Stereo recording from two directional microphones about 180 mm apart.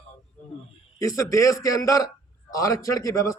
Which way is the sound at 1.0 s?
15° left (ahead or behind).